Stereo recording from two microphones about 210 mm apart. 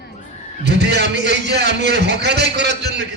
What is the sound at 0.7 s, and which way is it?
A man's voice, 55° right (ahead or behind).